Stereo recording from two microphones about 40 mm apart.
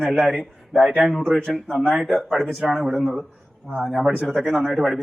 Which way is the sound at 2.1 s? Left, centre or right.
Centre.